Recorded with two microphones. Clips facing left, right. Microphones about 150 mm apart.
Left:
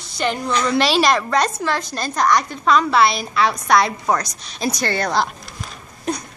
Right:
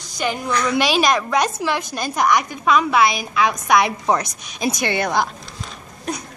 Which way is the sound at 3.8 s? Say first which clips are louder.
Right 1 dB; 15° right (ahead or behind).